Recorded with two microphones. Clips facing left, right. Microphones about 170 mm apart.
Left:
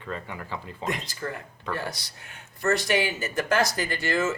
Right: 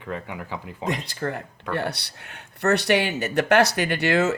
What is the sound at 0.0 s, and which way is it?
Speech, 10° right (ahead or behind).